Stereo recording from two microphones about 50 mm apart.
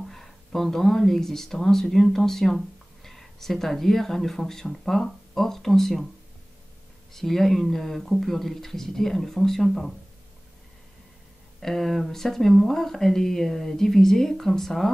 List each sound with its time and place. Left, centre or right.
0.0 s speech: centre
7.2 s speech: centre
11.6 s speech: centre